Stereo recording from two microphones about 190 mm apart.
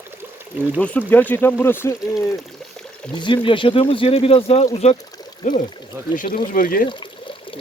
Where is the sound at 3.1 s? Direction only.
25° left (ahead or behind); by 6.9 s 50° left (ahead or behind).